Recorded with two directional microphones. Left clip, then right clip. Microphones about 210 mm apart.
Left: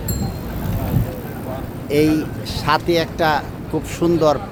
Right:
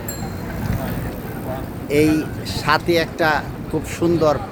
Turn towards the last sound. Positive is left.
turn(degrees=10)  # may be behind; listen again after turning